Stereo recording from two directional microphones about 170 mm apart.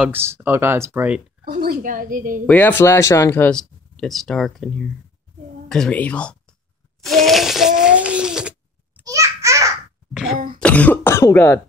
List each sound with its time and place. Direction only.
0.0 s speech: 15° right (ahead or behind)
1.4 s a woman's voice: 60° right (ahead or behind)
2.4 s speech: 10° left (ahead or behind)
7.0 s a sound: centre (ahead or behind)
9.0 s a sound: 20° right (ahead or behind)
10.6 s speech: 10° left (ahead or behind)